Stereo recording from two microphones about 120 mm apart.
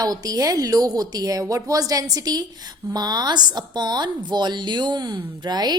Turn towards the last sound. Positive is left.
turn(degrees=-35)  # may be behind; listen again after turning